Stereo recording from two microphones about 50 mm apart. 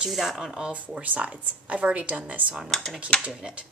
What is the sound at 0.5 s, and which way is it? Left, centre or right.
Speech, right.